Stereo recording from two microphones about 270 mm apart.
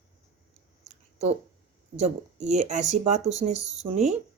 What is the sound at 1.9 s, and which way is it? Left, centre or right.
Speech, right.